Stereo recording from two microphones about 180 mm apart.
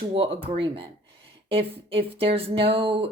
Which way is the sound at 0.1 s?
30° right (ahead or behind).